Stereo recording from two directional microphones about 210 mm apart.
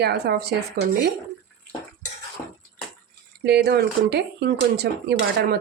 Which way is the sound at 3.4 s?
50° right (ahead or behind).